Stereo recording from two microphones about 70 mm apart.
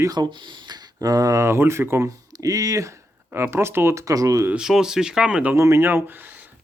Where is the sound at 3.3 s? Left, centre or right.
Right.